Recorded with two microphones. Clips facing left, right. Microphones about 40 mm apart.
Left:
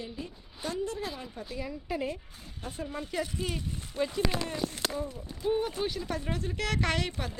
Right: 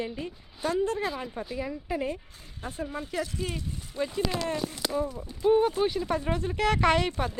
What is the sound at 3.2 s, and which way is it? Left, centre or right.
Speech, centre.